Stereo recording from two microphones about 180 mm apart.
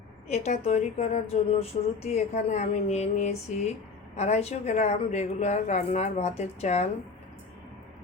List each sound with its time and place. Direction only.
0.3 s speech: 40° left (ahead or behind)